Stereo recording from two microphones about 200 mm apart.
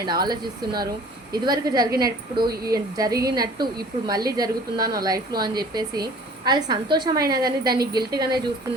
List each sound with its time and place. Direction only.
0.0 s a woman's voice: 20° right (ahead or behind)